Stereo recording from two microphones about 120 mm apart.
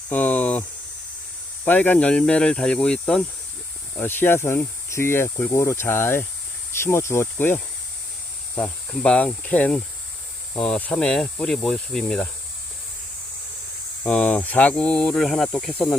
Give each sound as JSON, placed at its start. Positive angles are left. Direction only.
{"t": 0.1, "sound": "a sound", "side_deg": 15}
{"t": 1.6, "sound": "speech", "side_deg": 15}
{"t": 3.9, "sound": "speech", "side_deg": 15}
{"t": 14.0, "sound": "speech", "side_deg": 10}